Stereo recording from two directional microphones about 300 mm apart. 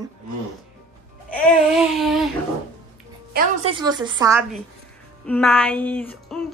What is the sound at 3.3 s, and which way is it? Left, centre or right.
Speech, right.